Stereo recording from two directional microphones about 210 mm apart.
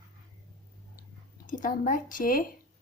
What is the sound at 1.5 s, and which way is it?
Speech, 40° left (ahead or behind).